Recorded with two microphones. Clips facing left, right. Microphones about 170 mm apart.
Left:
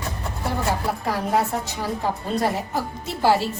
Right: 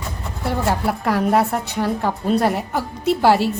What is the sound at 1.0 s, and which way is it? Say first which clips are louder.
A woman's voice: right 6 dB; 65° right (ahead or behind).